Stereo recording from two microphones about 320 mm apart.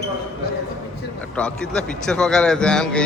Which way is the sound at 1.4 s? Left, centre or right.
Centre.